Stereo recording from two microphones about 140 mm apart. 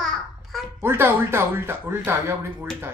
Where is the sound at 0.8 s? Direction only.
15° right (ahead or behind).